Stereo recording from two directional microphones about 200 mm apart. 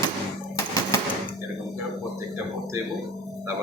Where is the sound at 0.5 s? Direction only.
15° left (ahead or behind).